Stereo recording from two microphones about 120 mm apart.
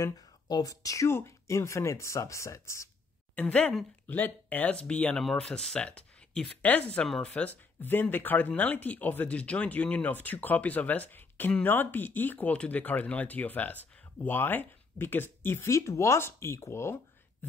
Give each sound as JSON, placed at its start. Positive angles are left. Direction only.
{"t": 0.0, "sound": "speech", "side_deg": 30}
{"t": 3.3, "sound": "speech", "side_deg": 10}
{"t": 17.4, "sound": "a sound", "side_deg": 15}